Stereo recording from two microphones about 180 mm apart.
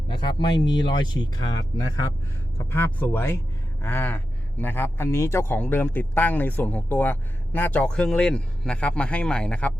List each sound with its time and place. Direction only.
0.1 s speech: 25° left (ahead or behind); by 9.7 s 5° left (ahead or behind)